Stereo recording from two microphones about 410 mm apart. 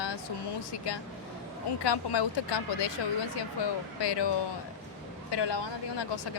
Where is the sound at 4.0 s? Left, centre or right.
Left.